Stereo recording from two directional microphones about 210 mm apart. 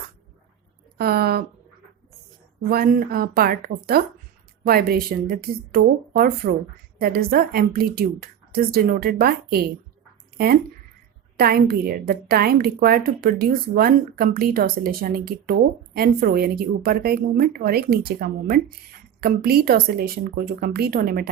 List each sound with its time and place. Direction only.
0.9 s a woman's voice: 45° right (ahead or behind)
2.6 s a woman's voice: 45° right (ahead or behind)